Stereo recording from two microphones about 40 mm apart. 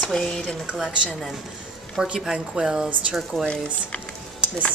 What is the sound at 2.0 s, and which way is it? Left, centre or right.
A woman's voice, centre.